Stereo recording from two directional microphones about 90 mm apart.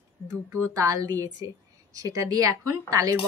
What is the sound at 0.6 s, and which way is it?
Speech, 35° right (ahead or behind).